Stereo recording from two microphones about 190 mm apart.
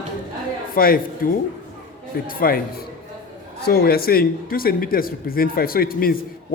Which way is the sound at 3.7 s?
55° left (ahead or behind).